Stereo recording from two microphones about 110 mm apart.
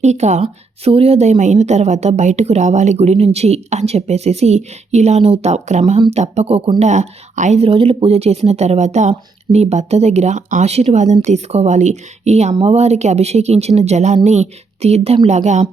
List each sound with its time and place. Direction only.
0.0 s a woman's voice: 90° right